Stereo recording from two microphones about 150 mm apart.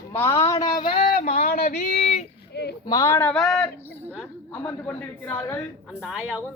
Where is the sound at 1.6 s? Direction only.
45° left (ahead or behind).